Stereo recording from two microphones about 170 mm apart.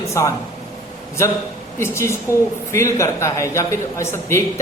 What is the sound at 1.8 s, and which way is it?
A man's voice, 15° left (ahead or behind).